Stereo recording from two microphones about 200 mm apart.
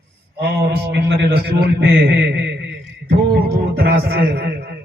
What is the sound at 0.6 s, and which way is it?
A man's voice, 60° right (ahead or behind).